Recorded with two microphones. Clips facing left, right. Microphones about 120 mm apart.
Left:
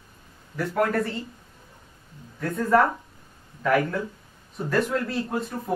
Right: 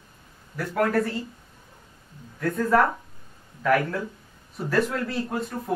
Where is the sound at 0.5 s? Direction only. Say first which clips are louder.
Even; centre (ahead or behind).